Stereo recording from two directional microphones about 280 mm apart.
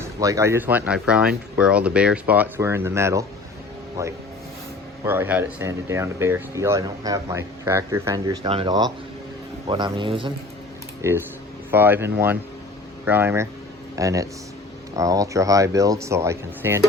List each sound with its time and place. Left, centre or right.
0.2 s speech: centre